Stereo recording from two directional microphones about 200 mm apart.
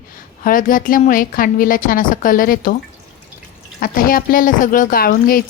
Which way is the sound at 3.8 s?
45° left (ahead or behind).